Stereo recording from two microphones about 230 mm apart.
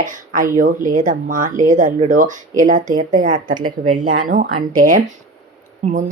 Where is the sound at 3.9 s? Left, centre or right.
Right.